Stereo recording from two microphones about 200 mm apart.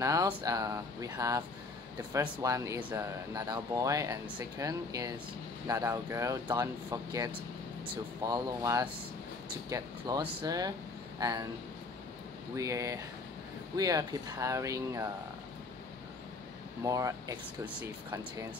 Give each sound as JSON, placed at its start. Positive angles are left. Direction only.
{"t": 0.0, "sound": "speech", "side_deg": -15}
{"t": 12.5, "sound": "speech", "side_deg": -15}
{"t": 16.8, "sound": "speech", "side_deg": -15}